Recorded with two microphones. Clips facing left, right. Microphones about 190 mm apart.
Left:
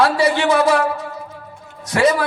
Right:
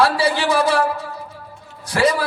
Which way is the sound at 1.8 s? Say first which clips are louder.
Left 2 dB; 30° right (ahead or behind).